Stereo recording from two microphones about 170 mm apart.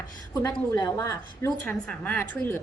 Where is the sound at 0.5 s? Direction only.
15° left (ahead or behind).